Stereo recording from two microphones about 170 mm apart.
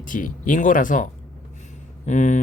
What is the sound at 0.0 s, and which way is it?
Speech, 50° left (ahead or behind).